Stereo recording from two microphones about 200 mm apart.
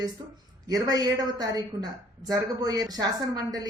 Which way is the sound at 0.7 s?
20° right (ahead or behind).